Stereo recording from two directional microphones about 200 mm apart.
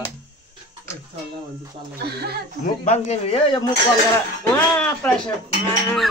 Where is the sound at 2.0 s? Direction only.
55° right (ahead or behind).